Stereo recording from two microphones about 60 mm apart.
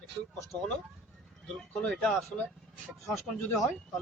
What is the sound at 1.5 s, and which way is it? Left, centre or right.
Speech, centre.